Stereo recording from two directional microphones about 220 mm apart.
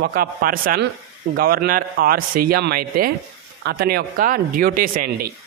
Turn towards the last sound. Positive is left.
turn(degrees=-40)  # may be behind; listen again after turning